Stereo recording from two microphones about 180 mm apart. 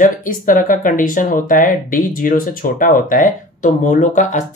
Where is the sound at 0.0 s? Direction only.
50° left (ahead or behind).